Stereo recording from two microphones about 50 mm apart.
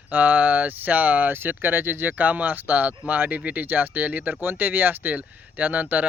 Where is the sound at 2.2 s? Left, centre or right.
Right.